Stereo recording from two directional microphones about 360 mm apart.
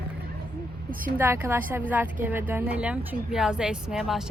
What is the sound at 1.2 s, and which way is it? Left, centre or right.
A woman's voice, centre.